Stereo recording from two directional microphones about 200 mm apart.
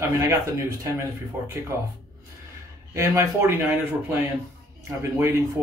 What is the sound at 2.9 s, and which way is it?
A man's voice, 15° right (ahead or behind).